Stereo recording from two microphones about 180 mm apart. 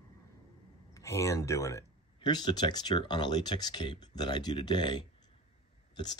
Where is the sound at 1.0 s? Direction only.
15° left (ahead or behind).